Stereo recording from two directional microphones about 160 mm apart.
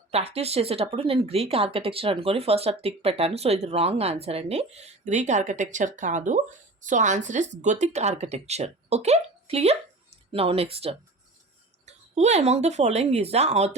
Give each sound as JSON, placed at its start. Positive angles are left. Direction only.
{"t": 0.1, "sound": "speech", "side_deg": -40}